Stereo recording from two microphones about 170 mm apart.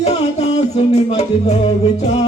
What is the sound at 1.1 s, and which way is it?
Music, 40° left (ahead or behind).